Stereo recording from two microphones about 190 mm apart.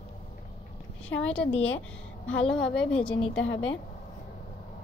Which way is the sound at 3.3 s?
90° left.